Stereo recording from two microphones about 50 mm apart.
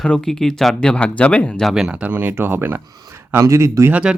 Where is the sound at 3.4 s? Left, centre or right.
Right.